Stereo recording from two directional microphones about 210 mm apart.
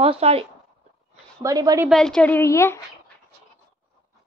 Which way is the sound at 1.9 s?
5° left (ahead or behind).